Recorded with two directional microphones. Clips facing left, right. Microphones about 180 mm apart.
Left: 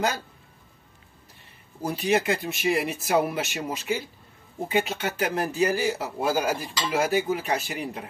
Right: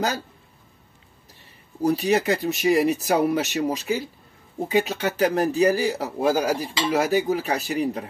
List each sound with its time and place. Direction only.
1.8 s speech: 40° right (ahead or behind)